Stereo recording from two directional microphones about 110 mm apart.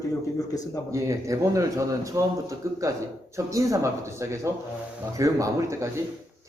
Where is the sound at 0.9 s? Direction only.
30° right (ahead or behind).